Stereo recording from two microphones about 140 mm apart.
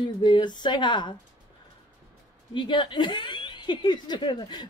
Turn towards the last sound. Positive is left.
turn(degrees=30)  # may be behind; listen again after turning